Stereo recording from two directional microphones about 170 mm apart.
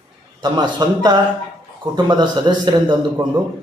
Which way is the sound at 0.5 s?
25° right (ahead or behind).